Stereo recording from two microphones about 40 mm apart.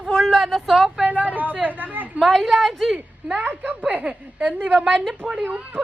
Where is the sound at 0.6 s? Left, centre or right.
Centre.